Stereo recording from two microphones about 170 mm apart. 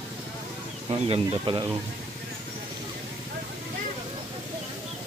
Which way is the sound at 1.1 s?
30° right (ahead or behind).